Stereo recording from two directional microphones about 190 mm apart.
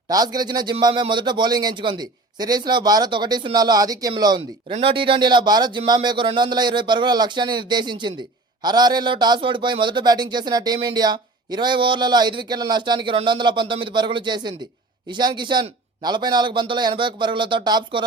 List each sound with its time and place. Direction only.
0.3 s a man's voice: 20° right (ahead or behind)